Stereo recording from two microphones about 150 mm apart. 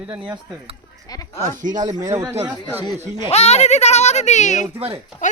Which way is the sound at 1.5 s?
60° right (ahead or behind).